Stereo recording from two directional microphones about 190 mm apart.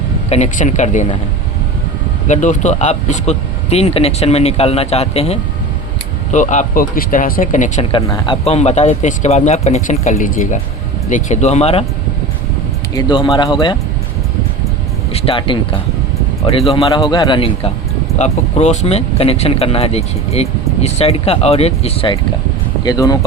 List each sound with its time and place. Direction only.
0.3 s speech: 40° left (ahead or behind)
2.2 s speech: 40° left (ahead or behind)
8.0 s speech: 20° left (ahead or behind)
8.4 s speech: 35° left (ahead or behind)
12.9 s speech: 20° left (ahead or behind)
15.1 s speech: 25° left (ahead or behind)
18.2 s speech: 35° left (ahead or behind); by 23.2 s 20° left (ahead or behind)